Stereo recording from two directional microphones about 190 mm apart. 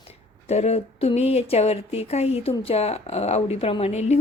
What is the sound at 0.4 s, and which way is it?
Speech, 35° left (ahead or behind).